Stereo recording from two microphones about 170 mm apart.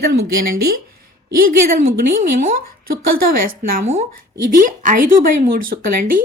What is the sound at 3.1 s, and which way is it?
A woman's voice, 60° right (ahead or behind).